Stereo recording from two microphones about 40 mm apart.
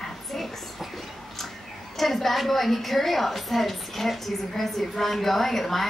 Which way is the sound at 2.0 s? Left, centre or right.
Centre.